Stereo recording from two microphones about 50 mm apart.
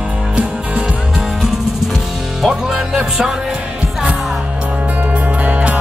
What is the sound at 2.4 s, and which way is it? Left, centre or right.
Music, centre.